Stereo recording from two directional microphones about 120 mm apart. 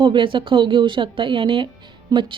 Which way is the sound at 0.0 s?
45° right (ahead or behind).